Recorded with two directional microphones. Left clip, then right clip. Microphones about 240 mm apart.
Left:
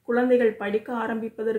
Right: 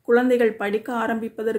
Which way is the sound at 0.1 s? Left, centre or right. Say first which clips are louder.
Right 3 dB; right.